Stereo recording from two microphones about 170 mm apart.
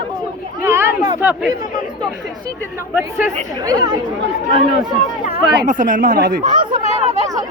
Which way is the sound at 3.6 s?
20° right (ahead or behind).